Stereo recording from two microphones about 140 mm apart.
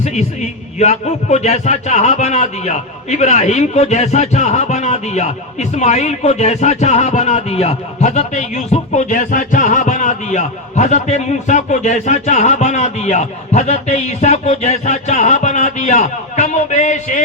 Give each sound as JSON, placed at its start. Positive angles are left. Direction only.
{"t": 0.0, "sound": "a man's voice", "side_deg": 55}